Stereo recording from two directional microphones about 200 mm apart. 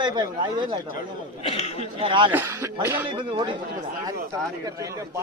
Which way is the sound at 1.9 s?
25° right (ahead or behind).